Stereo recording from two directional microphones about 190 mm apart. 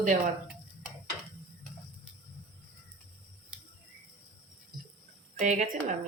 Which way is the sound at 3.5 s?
5° right (ahead or behind).